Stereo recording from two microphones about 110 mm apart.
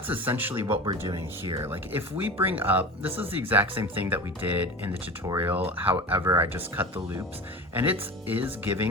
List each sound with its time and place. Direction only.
0.1 s speech: 15° right (ahead or behind)
0.7 s speech: 40° right (ahead or behind)
1.6 s speech: 20° right (ahead or behind)